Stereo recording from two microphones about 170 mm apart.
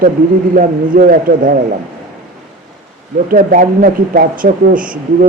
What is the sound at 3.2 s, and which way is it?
Speech, 50° right (ahead or behind).